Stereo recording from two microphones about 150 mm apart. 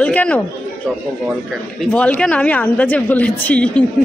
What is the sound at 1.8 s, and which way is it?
Speech, 10° left (ahead or behind).